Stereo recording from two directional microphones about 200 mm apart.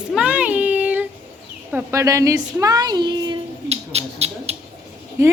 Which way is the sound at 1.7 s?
10° right (ahead or behind).